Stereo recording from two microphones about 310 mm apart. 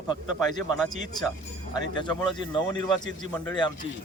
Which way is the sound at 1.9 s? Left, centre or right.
Centre.